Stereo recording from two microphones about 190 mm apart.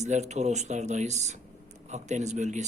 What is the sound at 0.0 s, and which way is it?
Speech, 35° right (ahead or behind).